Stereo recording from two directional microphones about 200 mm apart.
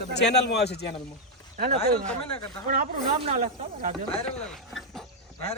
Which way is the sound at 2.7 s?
45° right (ahead or behind).